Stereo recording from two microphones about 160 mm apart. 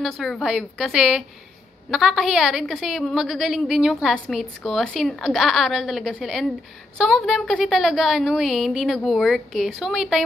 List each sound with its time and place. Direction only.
0.0 s a woman's voice: centre (ahead or behind)